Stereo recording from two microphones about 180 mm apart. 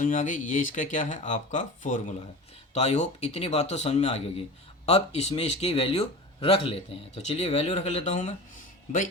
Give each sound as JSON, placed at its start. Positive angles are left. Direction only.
{"t": 0.0, "sound": "speech", "side_deg": 45}